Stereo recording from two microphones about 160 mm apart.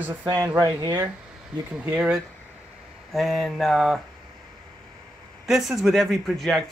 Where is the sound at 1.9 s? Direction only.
5° right (ahead or behind).